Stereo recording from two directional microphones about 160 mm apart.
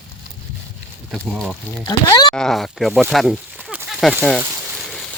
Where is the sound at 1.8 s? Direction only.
25° left (ahead or behind).